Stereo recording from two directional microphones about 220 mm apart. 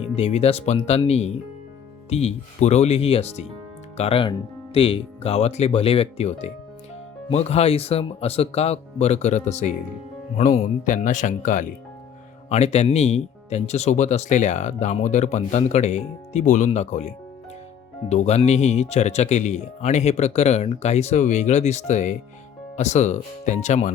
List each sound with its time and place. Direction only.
0.2 s speech: 30° left (ahead or behind)